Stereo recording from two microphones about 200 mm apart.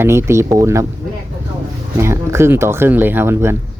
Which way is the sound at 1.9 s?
15° right (ahead or behind).